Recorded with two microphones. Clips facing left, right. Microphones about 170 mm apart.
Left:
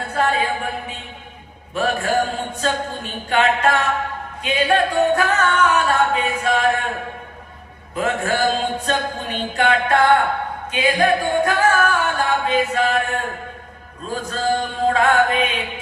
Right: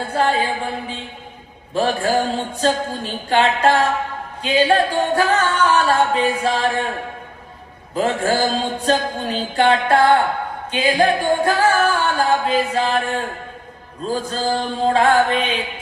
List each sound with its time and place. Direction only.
0.1 s a sound: 30° right (ahead or behind)
1.7 s a capella: 30° right (ahead or behind)
7.9 s a capella: 30° right (ahead or behind)
10.7 s singing: 30° right (ahead or behind)
14.1 s a capella: 30° right (ahead or behind)